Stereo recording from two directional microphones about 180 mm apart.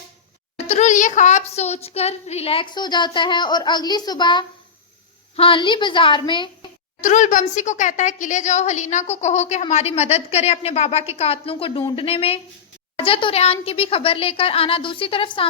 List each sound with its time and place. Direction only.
0.7 s a woman's voice: 40° left (ahead or behind)
7.0 s a woman's voice: 45° left (ahead or behind)